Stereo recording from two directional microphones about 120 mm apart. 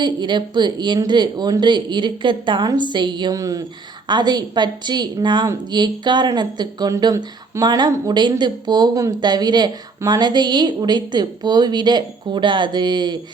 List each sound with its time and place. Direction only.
0.0 s speech: 40° right (ahead or behind)
3.3 s speech: 25° right (ahead or behind)